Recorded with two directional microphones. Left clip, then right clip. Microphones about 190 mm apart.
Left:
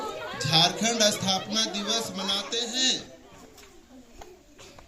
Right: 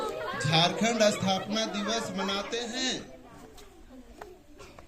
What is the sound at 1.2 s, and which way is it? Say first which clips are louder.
A man's voice: left 3 dB; 15° right (ahead or behind).